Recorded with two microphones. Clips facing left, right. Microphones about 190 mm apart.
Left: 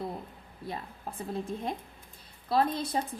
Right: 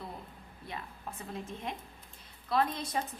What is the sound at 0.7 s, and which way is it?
A woman's voice, 35° left (ahead or behind).